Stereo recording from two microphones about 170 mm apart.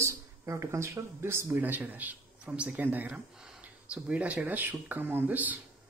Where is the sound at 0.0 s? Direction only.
15° right (ahead or behind).